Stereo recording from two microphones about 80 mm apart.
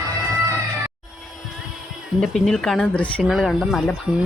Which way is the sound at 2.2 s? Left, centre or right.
Centre.